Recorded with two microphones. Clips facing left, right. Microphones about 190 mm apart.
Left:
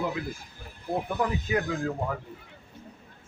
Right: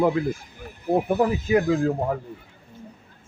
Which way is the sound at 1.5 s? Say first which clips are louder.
Right 8 dB; 20° right (ahead or behind).